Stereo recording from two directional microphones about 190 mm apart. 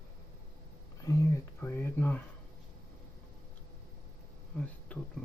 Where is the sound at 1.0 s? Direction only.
15° left (ahead or behind).